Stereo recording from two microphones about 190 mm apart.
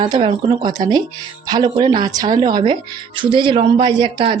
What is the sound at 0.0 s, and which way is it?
Speech, 25° right (ahead or behind).